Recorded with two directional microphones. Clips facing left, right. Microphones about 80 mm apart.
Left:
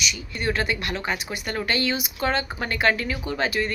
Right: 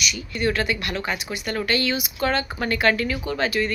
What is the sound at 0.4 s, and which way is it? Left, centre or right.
Speech, left.